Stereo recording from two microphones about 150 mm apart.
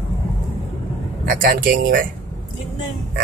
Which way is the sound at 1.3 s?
70° right (ahead or behind).